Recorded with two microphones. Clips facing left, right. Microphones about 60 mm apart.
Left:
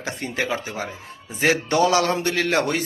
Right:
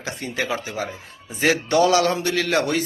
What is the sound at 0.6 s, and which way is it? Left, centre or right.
Speech, left.